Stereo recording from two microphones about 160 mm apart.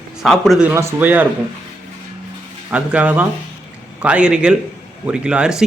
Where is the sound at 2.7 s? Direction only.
10° right (ahead or behind).